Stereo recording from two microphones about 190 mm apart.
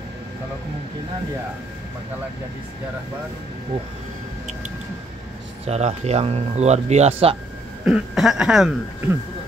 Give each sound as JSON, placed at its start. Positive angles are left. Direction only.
{"t": 5.7, "sound": "speech", "side_deg": -35}
{"t": 7.8, "sound": "speech", "side_deg": -5}